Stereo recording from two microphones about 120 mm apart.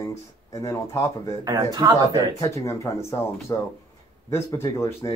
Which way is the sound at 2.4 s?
25° left (ahead or behind).